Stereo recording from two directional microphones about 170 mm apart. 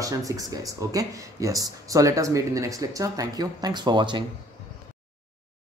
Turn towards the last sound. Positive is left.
turn(degrees=-30)  # may be behind; listen again after turning